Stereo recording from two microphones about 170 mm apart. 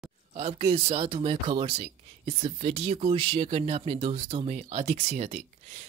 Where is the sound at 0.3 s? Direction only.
40° right (ahead or behind).